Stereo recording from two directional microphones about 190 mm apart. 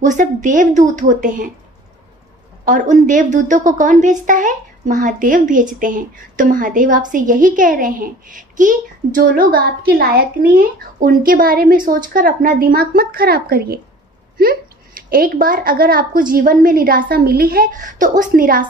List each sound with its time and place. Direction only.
0.0 s a woman's voice: 40° right (ahead or behind)
2.6 s a woman's voice: 45° right (ahead or behind)